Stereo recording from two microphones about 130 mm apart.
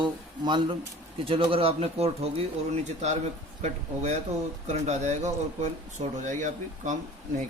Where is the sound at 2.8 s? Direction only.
60° right (ahead or behind).